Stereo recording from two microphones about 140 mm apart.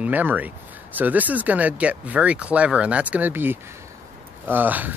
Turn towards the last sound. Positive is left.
turn(degrees=-15)  # may be behind; listen again after turning